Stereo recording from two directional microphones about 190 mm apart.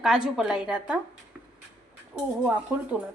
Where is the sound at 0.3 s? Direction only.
5° right (ahead or behind).